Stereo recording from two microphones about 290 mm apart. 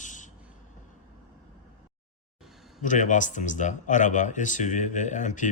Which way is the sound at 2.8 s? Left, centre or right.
Left.